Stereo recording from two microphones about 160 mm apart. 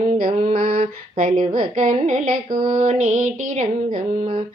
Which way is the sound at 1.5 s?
50° right (ahead or behind).